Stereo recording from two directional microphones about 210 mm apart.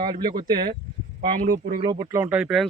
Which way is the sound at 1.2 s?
40° right (ahead or behind).